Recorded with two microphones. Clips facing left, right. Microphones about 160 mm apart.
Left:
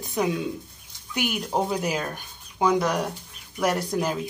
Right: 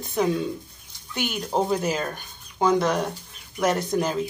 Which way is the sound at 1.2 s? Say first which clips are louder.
Right 1 dB; 5° left (ahead or behind).